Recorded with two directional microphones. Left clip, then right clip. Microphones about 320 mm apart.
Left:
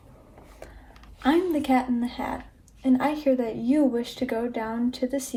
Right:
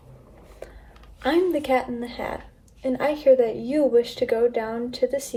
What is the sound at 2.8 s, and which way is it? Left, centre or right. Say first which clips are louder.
Speech: right 3 dB; centre.